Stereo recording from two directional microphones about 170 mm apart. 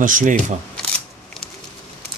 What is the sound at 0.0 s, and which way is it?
Speech, 50° right (ahead or behind).